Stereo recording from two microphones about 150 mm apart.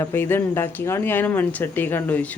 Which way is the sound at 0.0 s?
15° left (ahead or behind).